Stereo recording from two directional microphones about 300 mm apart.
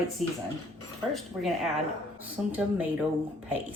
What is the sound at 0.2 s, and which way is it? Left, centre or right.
Speech, centre.